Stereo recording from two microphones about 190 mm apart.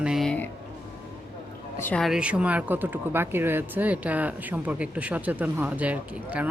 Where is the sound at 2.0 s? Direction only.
5° right (ahead or behind).